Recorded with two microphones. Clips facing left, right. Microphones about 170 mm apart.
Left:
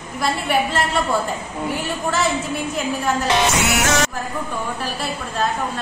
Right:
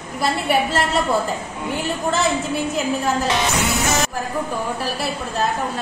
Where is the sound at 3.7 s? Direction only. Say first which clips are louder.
Left 1 dB; 80° left.